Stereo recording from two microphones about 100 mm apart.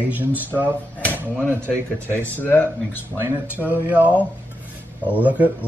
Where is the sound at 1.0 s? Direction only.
15° left (ahead or behind).